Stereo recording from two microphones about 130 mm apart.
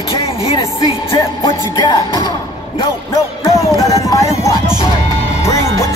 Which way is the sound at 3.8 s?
25° left (ahead or behind).